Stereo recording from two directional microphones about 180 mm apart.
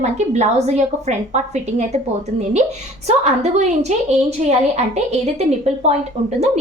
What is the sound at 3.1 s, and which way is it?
A woman's voice, 40° right (ahead or behind).